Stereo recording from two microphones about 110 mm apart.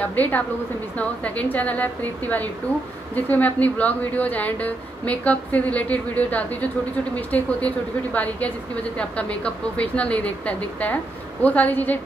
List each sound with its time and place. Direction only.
0.0 s speech: 15° left (ahead or behind)